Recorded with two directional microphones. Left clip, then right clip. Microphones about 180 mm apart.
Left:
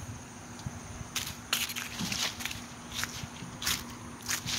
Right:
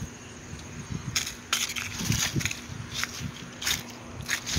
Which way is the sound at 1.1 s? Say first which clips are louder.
Right 4 dB; 50° right (ahead or behind).